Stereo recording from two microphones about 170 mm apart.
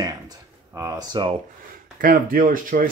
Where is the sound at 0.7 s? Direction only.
20° right (ahead or behind).